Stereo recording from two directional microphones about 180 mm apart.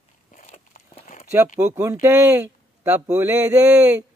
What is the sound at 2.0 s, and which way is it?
Speech, 15° right (ahead or behind).